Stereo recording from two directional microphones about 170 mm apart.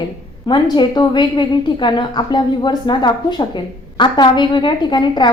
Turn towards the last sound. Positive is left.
turn(degrees=25)  # may be behind; listen again after turning